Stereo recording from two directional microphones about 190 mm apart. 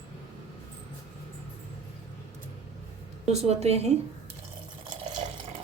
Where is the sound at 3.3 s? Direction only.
35° right (ahead or behind).